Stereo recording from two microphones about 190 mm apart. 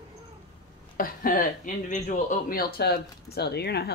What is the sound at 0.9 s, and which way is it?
Speech, 45° left (ahead or behind).